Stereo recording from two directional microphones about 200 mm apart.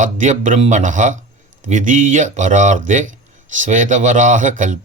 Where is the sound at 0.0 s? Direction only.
40° right (ahead or behind).